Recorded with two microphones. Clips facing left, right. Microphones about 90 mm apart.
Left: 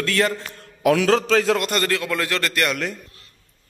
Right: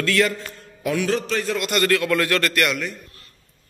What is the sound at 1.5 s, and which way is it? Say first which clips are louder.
Speech: even; 35° left (ahead or behind).